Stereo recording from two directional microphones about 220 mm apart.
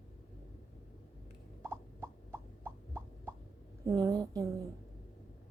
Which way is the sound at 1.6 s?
10° right (ahead or behind).